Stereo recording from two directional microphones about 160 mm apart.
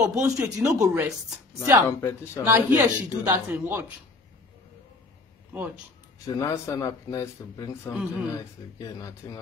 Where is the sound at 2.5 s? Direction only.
20° right (ahead or behind).